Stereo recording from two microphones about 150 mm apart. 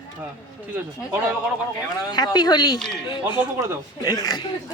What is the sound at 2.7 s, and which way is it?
Speech, 5° left (ahead or behind).